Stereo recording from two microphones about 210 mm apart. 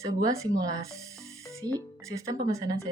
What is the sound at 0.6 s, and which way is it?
Speech, 15° right (ahead or behind).